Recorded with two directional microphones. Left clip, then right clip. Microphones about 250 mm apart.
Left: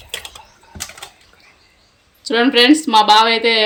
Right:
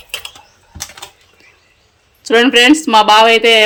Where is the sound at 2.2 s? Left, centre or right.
Centre.